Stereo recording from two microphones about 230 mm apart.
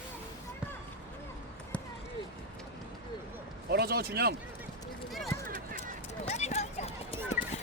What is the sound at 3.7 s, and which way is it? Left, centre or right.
Speech, right.